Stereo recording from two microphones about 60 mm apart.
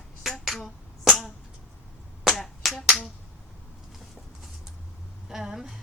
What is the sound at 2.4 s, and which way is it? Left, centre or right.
Finger snapping, centre.